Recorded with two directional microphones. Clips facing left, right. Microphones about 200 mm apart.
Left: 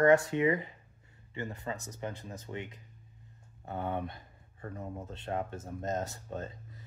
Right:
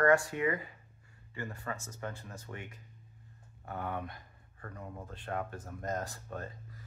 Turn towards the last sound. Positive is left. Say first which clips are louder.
# left 2 dB
turn(degrees=20)  # may be behind; listen again after turning